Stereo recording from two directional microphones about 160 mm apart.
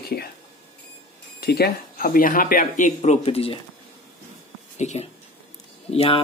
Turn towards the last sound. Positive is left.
turn(degrees=35)  # may be behind; listen again after turning